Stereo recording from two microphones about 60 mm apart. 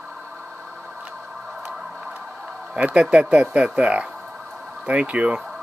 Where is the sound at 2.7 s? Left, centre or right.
Centre.